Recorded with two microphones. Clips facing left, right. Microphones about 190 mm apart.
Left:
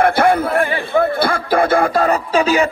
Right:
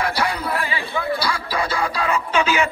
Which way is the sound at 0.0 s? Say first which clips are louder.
Left 10 dB; 50° left (ahead or behind).